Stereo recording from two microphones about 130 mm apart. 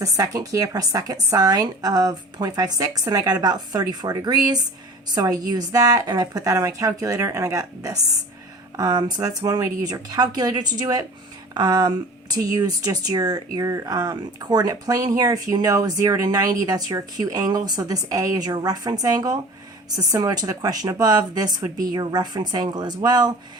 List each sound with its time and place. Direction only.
0.0 s speech: 25° right (ahead or behind)